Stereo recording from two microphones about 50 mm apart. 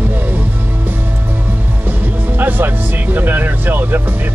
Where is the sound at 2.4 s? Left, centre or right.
Right.